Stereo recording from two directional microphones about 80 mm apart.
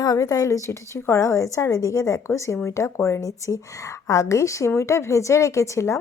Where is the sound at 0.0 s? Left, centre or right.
Left.